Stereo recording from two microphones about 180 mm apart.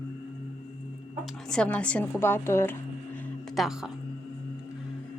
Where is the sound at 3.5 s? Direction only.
Centre (ahead or behind).